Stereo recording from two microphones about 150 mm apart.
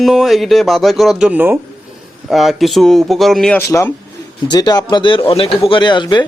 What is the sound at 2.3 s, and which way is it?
Speech, centre (ahead or behind).